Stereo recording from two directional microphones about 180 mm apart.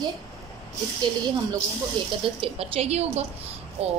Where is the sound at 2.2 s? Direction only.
30° right (ahead or behind).